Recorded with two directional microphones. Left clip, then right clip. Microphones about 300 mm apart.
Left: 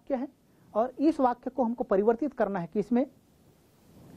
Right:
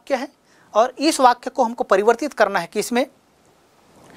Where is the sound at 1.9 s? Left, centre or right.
Centre.